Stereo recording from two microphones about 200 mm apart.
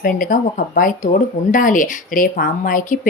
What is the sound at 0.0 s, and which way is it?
Speech, 45° left (ahead or behind).